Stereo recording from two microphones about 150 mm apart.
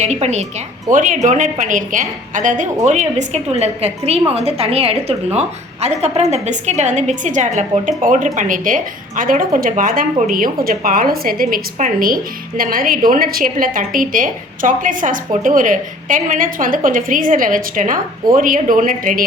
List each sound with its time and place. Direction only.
0.0 s a woman's voice: 50° right (ahead or behind); by 19.2 s 65° right (ahead or behind)